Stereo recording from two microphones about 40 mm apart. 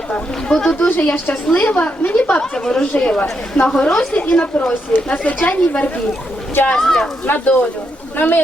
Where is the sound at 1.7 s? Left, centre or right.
Left.